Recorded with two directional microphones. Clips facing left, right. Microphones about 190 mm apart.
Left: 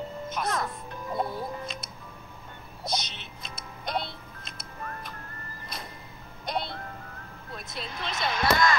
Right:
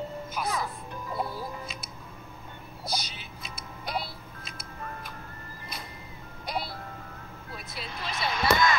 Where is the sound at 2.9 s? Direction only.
5° right (ahead or behind).